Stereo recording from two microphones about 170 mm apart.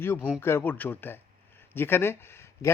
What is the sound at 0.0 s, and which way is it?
A man's voice, 15° left (ahead or behind).